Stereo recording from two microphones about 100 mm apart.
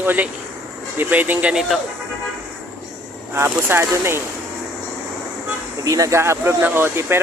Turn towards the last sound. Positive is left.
turn(degrees=-25)  # may be behind; listen again after turning